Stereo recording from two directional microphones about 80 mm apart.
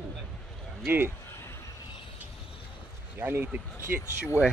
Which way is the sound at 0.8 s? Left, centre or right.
Right.